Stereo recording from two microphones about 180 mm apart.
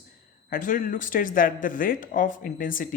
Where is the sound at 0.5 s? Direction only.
45° left (ahead or behind).